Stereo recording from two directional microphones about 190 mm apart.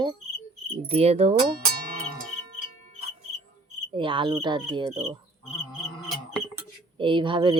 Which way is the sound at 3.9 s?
25° right (ahead or behind).